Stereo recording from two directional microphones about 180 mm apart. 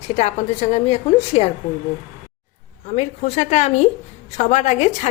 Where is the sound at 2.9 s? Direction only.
40° left (ahead or behind).